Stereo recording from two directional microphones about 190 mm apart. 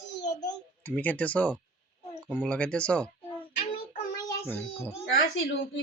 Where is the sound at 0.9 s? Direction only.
10° left (ahead or behind).